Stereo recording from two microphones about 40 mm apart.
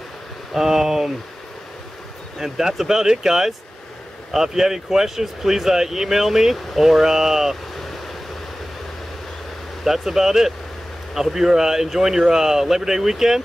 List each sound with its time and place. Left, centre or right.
0.5 s speech: centre
2.4 s speech: centre
9.8 s speech: centre